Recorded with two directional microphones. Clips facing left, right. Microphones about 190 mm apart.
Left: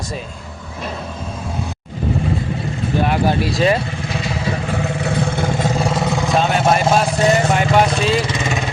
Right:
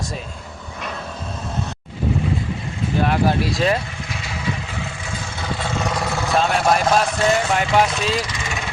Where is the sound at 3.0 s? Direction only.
Centre (ahead or behind).